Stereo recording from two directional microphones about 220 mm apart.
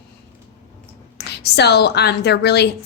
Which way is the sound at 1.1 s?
50° left (ahead or behind).